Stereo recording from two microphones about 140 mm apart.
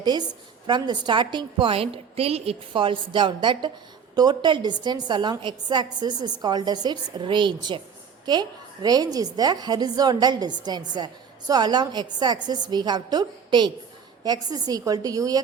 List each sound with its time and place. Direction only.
0.0 s a woman's voice: 30° right (ahead or behind)